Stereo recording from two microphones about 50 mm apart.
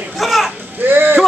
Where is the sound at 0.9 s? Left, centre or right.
Right.